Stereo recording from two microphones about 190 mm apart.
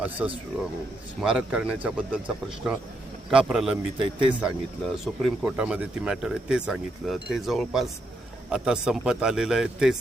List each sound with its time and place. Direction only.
0.0 s speech: 10° right (ahead or behind)
3.9 s speech: 25° right (ahead or behind)
4.8 s speech: centre (ahead or behind)